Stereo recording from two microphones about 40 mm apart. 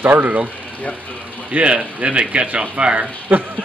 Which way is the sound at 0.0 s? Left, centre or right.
Right.